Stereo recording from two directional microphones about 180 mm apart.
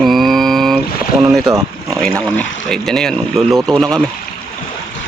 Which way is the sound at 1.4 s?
15° right (ahead or behind).